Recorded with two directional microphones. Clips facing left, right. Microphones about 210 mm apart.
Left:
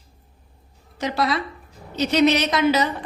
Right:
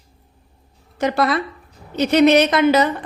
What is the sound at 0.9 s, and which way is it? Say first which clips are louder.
A woman's voice: right 4 dB; 55° right (ahead or behind).